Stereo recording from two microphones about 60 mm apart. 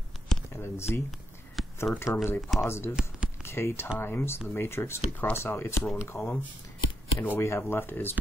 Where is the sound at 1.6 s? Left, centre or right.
Centre.